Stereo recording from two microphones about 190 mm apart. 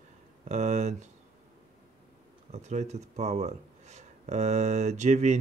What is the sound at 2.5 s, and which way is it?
Speech, 35° right (ahead or behind).